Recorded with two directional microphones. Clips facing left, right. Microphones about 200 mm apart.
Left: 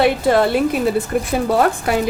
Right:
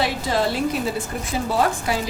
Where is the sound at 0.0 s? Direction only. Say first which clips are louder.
Left 8 dB; 60° left (ahead or behind).